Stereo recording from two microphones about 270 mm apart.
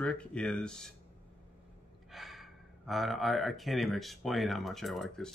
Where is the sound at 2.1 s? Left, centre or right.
Centre.